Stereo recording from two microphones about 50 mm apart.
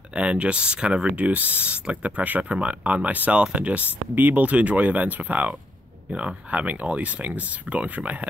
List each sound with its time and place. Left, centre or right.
0.1 s speech: right